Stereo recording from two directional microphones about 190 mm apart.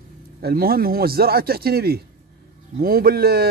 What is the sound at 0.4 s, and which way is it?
Speech, 55° right (ahead or behind).